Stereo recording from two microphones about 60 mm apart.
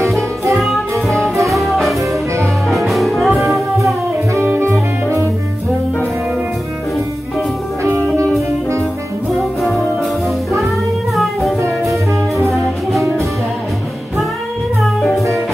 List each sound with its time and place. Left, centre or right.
0.6 s music: centre
3.8 s music: right
4.5 s saxophone: right
11.8 s music: centre